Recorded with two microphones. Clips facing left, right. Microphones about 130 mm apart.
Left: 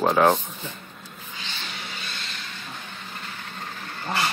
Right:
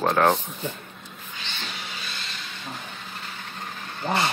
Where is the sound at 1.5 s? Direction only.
Centre (ahead or behind).